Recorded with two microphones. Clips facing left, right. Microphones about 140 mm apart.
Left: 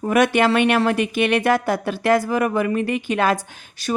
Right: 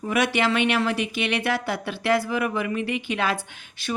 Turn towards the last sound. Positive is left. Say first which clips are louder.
# left 5 dB
turn(degrees=40)  # may be behind; listen again after turning